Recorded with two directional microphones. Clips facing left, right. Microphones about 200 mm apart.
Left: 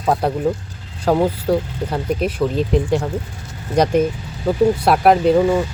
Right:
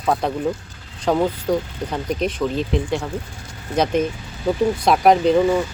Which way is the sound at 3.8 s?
10° left (ahead or behind).